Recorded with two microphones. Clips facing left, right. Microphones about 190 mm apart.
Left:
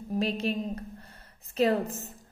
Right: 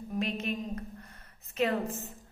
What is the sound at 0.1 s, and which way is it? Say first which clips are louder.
A woman's voice: left 4 dB; 35° left (ahead or behind).